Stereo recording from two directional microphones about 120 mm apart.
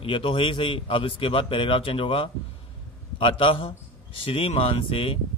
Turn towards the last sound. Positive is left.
turn(degrees=45)  # may be behind; listen again after turning